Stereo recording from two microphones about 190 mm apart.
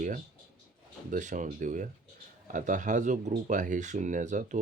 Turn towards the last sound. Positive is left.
turn(degrees=-40)  # may be behind; listen again after turning